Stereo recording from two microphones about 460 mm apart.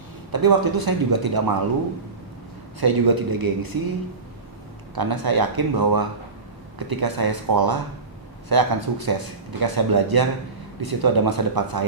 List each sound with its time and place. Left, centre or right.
0.3 s speech: right
2.8 s speech: right
4.9 s speech: right